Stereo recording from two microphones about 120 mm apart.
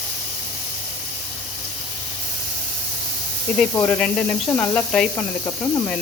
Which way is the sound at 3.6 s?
15° left (ahead or behind).